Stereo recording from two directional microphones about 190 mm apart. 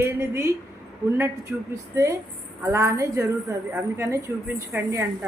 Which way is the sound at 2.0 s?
15° right (ahead or behind).